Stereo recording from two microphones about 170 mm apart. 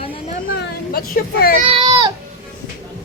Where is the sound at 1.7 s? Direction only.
30° right (ahead or behind).